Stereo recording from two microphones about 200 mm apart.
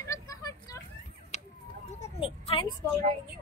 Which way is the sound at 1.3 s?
35° left (ahead or behind).